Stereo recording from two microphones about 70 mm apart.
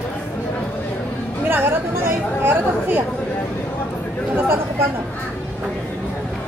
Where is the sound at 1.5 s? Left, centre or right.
Right.